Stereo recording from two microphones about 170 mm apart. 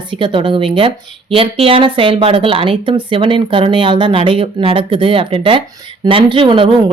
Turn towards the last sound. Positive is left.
turn(degrees=-30)  # may be behind; listen again after turning